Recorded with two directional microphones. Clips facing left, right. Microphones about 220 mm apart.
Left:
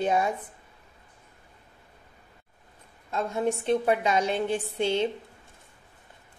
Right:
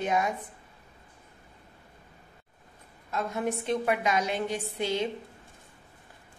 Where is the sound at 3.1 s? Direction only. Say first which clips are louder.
Left 3 dB; 30° left (ahead or behind).